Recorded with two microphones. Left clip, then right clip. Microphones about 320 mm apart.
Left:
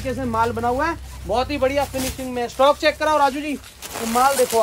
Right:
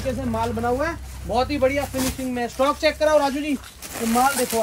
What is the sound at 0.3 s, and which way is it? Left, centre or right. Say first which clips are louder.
Speech: left 4 dB; centre.